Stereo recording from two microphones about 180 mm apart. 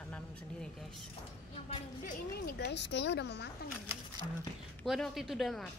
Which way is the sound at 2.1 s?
60° left (ahead or behind).